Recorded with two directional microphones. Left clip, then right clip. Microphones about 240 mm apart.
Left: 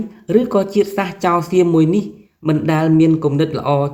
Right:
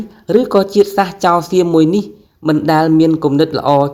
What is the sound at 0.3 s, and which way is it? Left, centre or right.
Speech, right.